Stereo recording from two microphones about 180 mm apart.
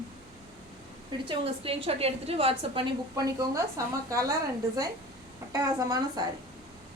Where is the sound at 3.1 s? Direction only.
20° right (ahead or behind).